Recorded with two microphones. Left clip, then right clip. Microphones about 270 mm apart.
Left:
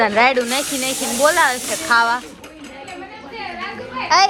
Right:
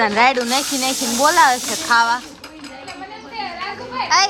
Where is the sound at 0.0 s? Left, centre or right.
Centre.